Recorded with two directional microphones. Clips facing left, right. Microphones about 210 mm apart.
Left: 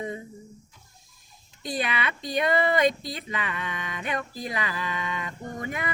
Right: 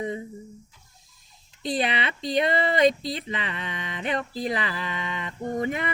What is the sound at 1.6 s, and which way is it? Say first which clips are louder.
Speech: right 3 dB; 25° right (ahead or behind).